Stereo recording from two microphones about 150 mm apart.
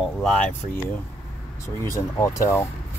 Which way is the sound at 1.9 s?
20° left (ahead or behind).